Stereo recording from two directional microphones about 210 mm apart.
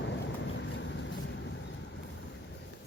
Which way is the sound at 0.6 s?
60° left (ahead or behind).